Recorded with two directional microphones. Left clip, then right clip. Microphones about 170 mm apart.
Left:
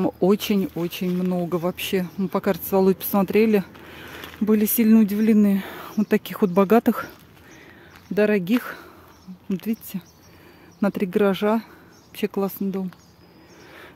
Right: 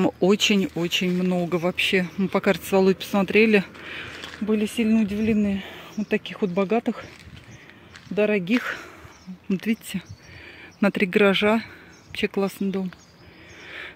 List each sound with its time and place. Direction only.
0.2 s speech: 10° left (ahead or behind)
4.5 s speech: 35° left (ahead or behind)
8.1 s speech: 25° left (ahead or behind)
8.5 s speech: 5° right (ahead or behind)
13.7 s a sound: 5° left (ahead or behind)